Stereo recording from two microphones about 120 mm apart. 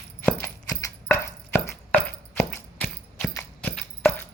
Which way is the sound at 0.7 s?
25° left (ahead or behind).